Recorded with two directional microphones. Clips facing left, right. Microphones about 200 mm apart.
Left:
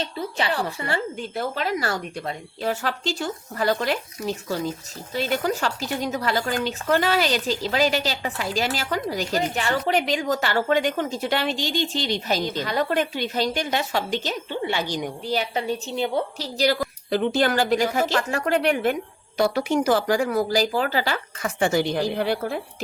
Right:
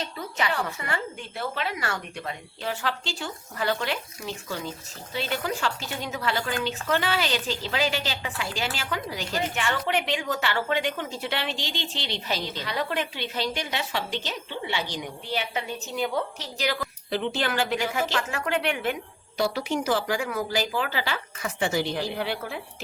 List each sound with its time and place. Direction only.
0.0 s a woman's voice: 30° left (ahead or behind)